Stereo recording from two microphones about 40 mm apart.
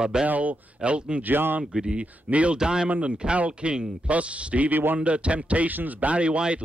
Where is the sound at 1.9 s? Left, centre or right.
Right.